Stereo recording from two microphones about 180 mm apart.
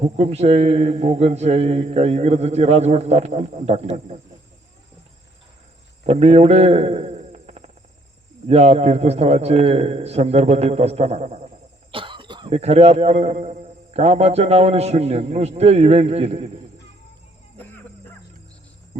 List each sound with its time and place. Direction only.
0.0 s speech: 35° right (ahead or behind)
6.1 s a man's voice: 35° right (ahead or behind)